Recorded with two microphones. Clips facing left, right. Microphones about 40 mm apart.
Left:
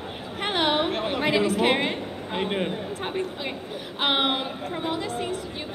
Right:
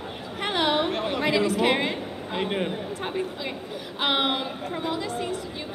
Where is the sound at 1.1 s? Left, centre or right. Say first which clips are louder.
Left 1 dB; left.